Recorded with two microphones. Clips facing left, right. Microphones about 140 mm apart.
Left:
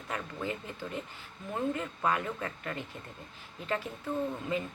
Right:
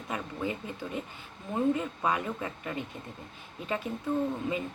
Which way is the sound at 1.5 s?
20° right (ahead or behind).